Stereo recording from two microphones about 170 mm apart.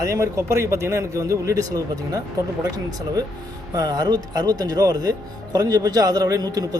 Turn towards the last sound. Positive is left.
turn(degrees=-20)  # may be behind; listen again after turning